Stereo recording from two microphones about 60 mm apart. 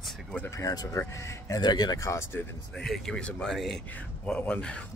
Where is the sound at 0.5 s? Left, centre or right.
Left.